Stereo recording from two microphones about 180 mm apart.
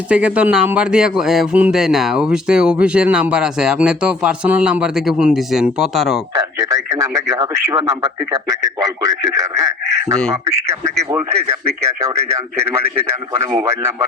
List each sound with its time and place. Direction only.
0.1 s speech: 5° right (ahead or behind)
6.6 s speech: 20° right (ahead or behind)
13.6 s speech: 15° right (ahead or behind)